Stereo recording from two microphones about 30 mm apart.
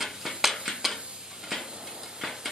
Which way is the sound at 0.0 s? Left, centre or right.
Centre.